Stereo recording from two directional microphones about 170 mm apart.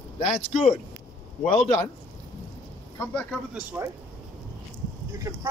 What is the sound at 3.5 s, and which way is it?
Speech, 15° right (ahead or behind).